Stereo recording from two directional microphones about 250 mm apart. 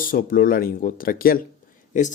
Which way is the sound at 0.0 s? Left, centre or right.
Left.